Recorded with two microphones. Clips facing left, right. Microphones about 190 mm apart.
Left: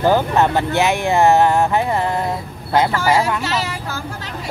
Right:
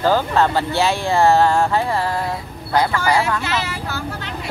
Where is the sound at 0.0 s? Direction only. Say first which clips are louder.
Left 2 dB; 15° left (ahead or behind).